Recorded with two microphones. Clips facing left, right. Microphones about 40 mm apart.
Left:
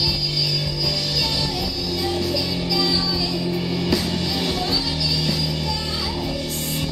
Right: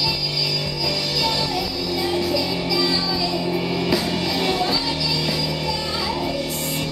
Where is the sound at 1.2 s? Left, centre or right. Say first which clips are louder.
Right 2 dB; centre.